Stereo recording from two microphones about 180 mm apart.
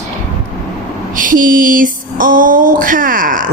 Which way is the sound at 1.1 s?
50° right (ahead or behind).